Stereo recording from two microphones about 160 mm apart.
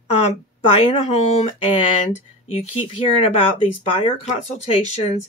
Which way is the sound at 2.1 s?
45° left (ahead or behind).